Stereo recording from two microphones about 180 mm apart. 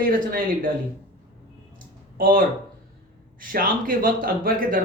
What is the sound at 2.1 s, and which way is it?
Speech, 50° right (ahead or behind).